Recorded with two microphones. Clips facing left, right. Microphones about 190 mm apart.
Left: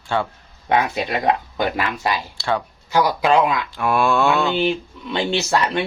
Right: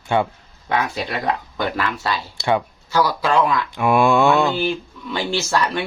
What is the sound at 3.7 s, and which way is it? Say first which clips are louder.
Cattle: right 3 dB; 15° right (ahead or behind).